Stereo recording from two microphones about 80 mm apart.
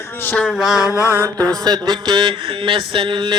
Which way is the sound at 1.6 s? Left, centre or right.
Right.